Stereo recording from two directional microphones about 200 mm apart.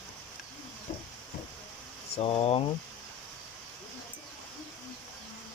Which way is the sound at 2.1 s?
30° left (ahead or behind).